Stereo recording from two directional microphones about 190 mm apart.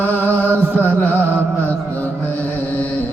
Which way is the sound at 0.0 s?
10° left (ahead or behind).